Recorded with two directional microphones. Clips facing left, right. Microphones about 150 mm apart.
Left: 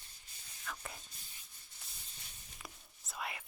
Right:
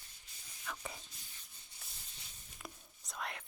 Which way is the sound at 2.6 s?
5° left (ahead or behind).